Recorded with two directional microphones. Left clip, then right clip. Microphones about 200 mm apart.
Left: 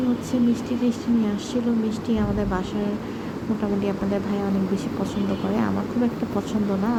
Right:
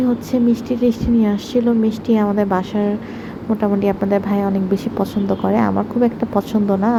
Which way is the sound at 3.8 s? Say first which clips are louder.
Right 8 dB; 30° right (ahead or behind).